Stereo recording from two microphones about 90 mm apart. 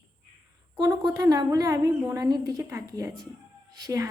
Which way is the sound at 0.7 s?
50° right (ahead or behind).